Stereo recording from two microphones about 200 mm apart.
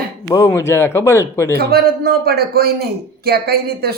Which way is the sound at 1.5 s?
50° right (ahead or behind).